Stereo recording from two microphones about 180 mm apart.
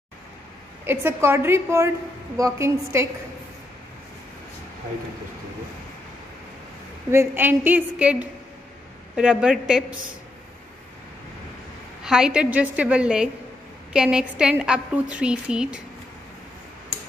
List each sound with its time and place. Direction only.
0.8 s a woman's voice: 15° right (ahead or behind)
7.1 s a woman's voice: 10° right (ahead or behind)
12.0 s a woman's voice: 5° right (ahead or behind)